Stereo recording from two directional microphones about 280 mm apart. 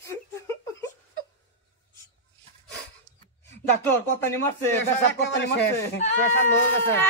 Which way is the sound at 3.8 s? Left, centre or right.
Centre.